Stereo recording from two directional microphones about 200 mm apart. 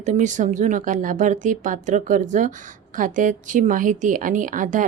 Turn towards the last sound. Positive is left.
turn(degrees=-40)  # may be behind; listen again after turning